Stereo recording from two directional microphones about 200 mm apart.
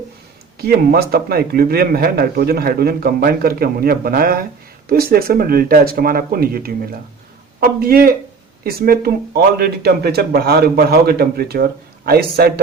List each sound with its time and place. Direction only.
0.7 s speech: 50° right (ahead or behind)